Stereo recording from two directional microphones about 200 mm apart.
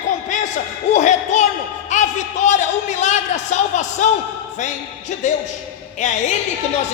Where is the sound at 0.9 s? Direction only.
35° left (ahead or behind).